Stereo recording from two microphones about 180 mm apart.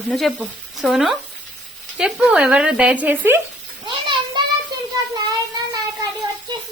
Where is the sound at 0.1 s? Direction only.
Centre (ahead or behind).